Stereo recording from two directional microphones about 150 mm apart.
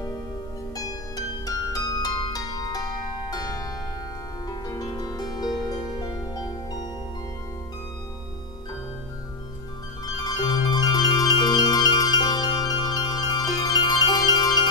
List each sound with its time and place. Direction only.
0.7 s harp: 25° left (ahead or behind)
10.2 s music: 25° left (ahead or behind)